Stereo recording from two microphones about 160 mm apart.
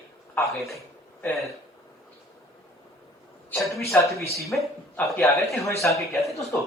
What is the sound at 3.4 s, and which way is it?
A woman's voice, 10° left (ahead or behind).